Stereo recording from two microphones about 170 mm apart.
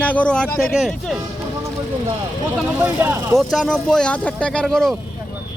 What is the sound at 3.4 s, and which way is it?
Speech, centre (ahead or behind).